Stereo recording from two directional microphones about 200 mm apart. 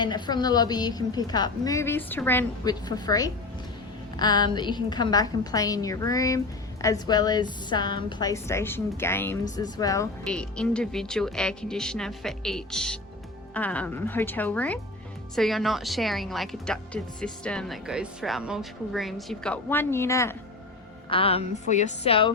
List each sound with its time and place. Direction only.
0.0 s a woman's voice: 20° left (ahead or behind)
10.2 s speech: 5° left (ahead or behind)
21.1 s a woman's voice: 30° left (ahead or behind)